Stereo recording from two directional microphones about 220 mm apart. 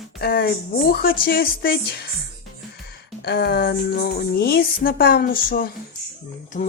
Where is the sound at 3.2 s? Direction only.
45° left (ahead or behind).